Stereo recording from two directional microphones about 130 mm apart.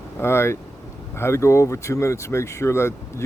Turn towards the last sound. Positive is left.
turn(degrees=20)  # may be behind; listen again after turning